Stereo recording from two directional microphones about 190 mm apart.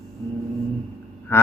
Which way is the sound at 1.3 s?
15° left (ahead or behind).